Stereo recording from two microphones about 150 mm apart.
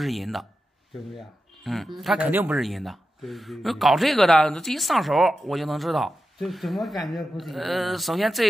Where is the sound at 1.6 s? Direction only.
Centre (ahead or behind).